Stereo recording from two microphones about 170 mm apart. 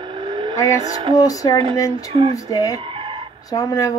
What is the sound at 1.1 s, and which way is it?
Speech, 20° left (ahead or behind).